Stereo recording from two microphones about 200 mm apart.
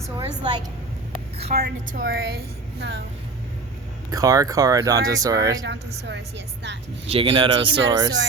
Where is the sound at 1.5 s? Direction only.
50° right (ahead or behind).